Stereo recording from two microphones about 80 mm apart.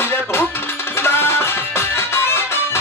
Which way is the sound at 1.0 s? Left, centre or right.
Left.